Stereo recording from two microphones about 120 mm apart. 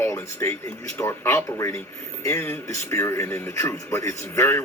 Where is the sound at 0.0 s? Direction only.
20° left (ahead or behind).